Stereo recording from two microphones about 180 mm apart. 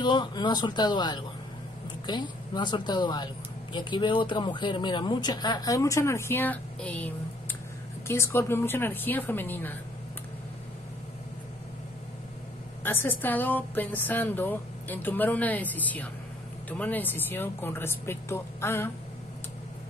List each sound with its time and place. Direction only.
0.0 s a woman's voice: 25° left (ahead or behind)
12.8 s a woman's voice: 10° left (ahead or behind)